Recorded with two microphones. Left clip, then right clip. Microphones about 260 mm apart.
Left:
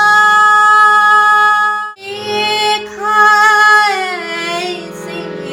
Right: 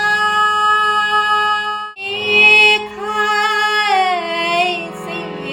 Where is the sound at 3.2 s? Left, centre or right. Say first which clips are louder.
Left 8 dB; left.